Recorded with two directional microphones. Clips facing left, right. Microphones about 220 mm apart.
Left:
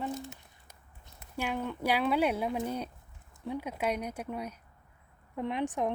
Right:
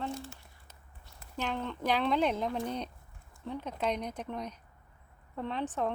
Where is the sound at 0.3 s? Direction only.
15° left (ahead or behind).